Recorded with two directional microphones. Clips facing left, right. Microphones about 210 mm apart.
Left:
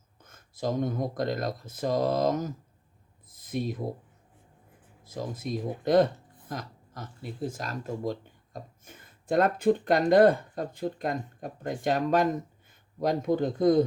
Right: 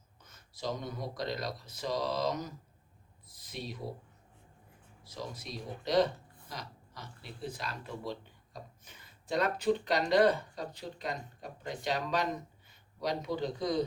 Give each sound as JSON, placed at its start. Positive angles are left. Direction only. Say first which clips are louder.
{"t": 0.2, "sound": "speech", "louder": "left 7 dB", "side_deg": 50}
{"t": 3.2, "sound": "a sound", "louder": "left 11 dB", "side_deg": 50}
{"t": 5.0, "sound": "speech", "louder": "left 8 dB", "side_deg": 50}